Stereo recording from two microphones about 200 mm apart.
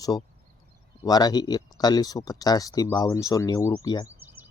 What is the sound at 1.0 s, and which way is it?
Speech, 20° left (ahead or behind).